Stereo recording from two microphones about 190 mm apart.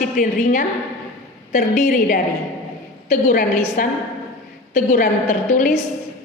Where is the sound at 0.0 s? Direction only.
45° left (ahead or behind).